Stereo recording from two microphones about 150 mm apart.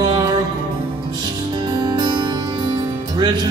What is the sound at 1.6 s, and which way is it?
Music, 30° right (ahead or behind).